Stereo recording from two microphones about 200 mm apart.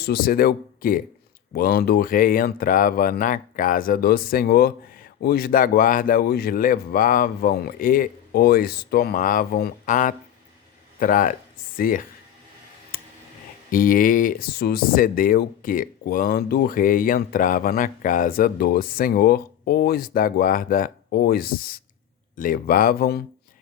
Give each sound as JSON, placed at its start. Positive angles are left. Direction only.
{"t": 0.0, "sound": "speech", "side_deg": 50}
{"t": 12.9, "sound": "clicking", "side_deg": 45}
{"t": 13.7, "sound": "speech", "side_deg": 45}